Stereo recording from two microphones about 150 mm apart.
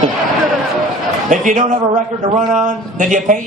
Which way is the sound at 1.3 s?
60° right (ahead or behind).